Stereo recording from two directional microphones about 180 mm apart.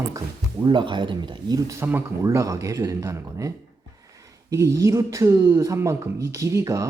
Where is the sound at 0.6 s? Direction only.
25° right (ahead or behind).